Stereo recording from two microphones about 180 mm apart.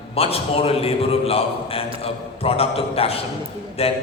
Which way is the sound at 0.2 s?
35° left (ahead or behind).